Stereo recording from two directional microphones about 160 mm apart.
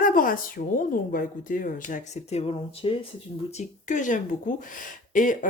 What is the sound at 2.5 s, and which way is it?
Speech, 35° left (ahead or behind).